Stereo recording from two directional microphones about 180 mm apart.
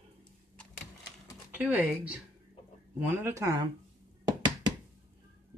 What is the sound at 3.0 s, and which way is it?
Speech, 10° right (ahead or behind).